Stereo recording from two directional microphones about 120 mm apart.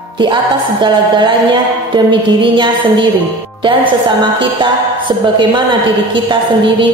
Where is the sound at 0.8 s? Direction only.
40° right (ahead or behind).